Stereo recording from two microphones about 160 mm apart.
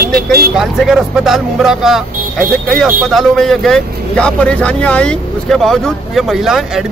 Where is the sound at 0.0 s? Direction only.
75° right (ahead or behind).